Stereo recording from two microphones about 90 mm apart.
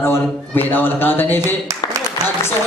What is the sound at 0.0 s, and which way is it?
A man's voice, 25° left (ahead or behind).